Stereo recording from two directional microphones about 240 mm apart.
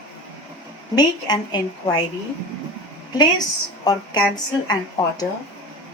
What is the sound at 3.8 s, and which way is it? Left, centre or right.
Speech, centre.